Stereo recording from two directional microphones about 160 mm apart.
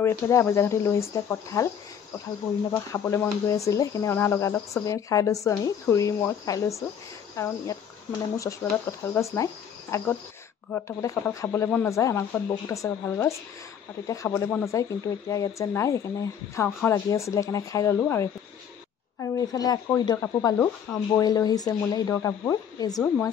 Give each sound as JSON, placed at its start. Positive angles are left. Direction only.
{"t": 0.0, "sound": "speech", "side_deg": 15}
{"t": 2.7, "sound": "speech", "side_deg": 20}